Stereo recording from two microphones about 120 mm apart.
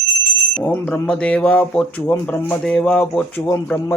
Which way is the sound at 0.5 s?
15° left (ahead or behind).